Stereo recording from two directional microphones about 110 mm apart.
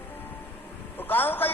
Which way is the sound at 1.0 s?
20° left (ahead or behind).